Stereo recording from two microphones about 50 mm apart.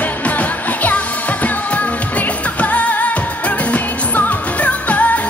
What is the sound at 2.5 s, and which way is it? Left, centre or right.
Music, left.